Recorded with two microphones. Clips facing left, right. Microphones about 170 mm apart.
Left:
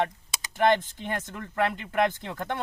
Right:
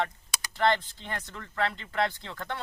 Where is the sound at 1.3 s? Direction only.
50° left (ahead or behind).